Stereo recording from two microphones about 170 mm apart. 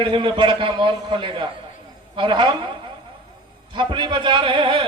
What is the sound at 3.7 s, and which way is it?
A man's voice, 30° right (ahead or behind).